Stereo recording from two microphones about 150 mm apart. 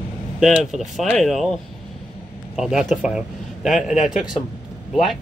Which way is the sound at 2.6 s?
5° right (ahead or behind).